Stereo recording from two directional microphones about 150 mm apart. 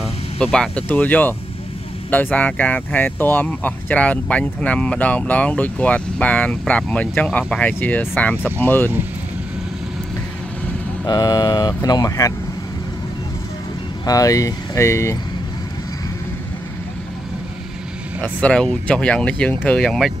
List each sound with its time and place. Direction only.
0.4 s speech: 5° left (ahead or behind)
11.1 s speech: 25° left (ahead or behind)
14.0 s speech: 25° left (ahead or behind)
18.2 s speech: 10° left (ahead or behind)